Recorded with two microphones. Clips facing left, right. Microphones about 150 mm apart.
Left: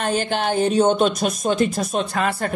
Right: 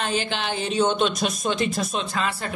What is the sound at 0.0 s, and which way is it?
Speech, 45° left (ahead or behind).